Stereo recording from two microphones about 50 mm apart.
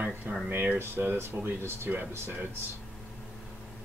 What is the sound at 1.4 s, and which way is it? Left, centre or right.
Speech, right.